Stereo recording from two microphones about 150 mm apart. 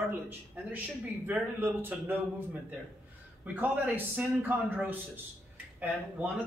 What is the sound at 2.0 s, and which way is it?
A man's voice, 10° right (ahead or behind).